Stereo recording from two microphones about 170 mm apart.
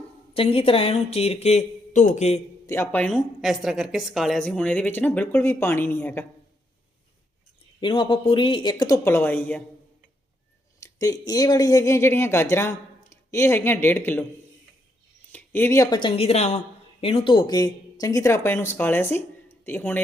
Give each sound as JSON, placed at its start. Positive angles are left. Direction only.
{"t": 0.3, "sound": "speech", "side_deg": 35}
{"t": 2.6, "sound": "a woman's voice", "side_deg": 15}
{"t": 7.8, "sound": "speech", "side_deg": 30}
{"t": 10.8, "sound": "a woman's voice", "side_deg": 20}
{"t": 15.3, "sound": "a woman's voice", "side_deg": 10}